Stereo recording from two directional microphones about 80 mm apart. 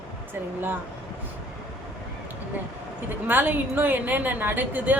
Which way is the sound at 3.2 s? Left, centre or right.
Right.